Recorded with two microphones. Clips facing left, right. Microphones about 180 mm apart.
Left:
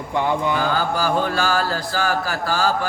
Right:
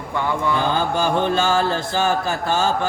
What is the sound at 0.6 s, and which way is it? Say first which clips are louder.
Speech: right 1 dB; 20° right (ahead or behind).